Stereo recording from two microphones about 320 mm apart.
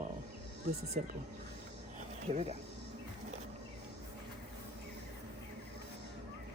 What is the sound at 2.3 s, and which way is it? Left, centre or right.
Speech, right.